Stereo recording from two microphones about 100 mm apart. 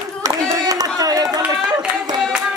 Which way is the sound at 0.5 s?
40° right (ahead or behind).